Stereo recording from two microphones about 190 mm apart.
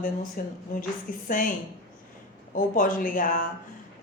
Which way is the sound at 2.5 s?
45° left (ahead or behind).